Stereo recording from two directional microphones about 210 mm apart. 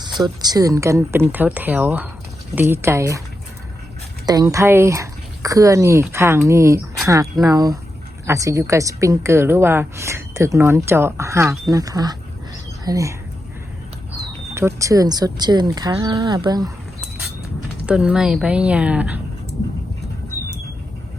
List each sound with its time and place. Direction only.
0.0 s a woman's voice: 20° right (ahead or behind)
4.3 s a woman's voice: 15° right (ahead or behind)
14.5 s speech: 15° right (ahead or behind)
17.8 s a woman's voice: 5° right (ahead or behind)